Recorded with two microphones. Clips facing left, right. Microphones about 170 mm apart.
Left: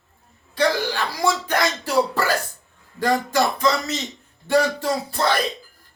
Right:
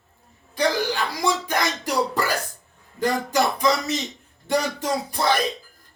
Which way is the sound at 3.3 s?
10° right (ahead or behind).